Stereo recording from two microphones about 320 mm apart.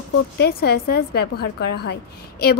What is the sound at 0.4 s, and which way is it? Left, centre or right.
A woman's voice, left.